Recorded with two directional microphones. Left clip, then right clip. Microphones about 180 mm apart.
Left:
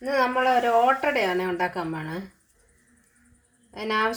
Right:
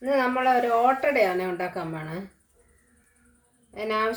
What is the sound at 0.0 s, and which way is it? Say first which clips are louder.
Speech: left 1 dB; 55° left (ahead or behind).